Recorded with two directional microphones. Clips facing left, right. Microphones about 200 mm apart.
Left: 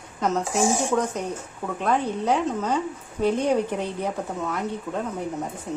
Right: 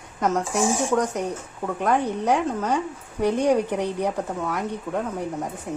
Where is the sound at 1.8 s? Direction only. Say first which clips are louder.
Right 1 dB; 15° right (ahead or behind).